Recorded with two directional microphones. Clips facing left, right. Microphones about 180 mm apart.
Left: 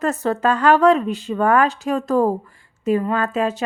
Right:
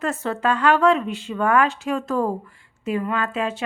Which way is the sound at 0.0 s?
40° left (ahead or behind).